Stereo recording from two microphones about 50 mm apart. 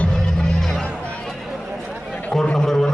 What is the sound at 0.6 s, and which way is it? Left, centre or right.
Music, centre.